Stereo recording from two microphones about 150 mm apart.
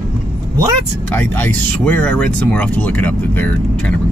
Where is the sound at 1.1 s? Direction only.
10° left (ahead or behind).